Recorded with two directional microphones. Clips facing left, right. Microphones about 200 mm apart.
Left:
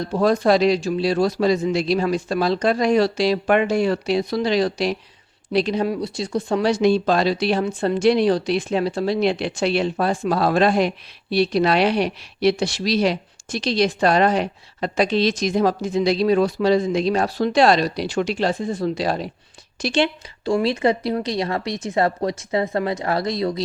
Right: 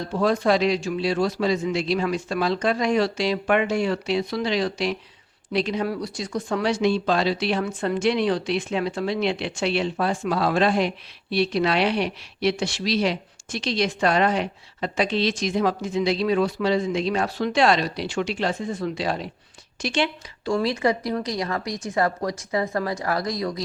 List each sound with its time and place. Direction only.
0.1 s speech: 40° left (ahead or behind)